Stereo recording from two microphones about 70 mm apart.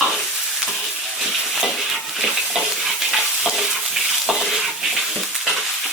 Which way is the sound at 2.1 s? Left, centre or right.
Centre.